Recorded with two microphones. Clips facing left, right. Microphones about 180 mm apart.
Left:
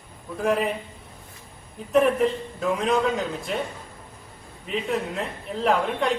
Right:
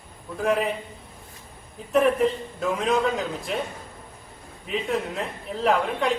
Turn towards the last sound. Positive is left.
turn(degrees=0)  # may be behind; listen again after turning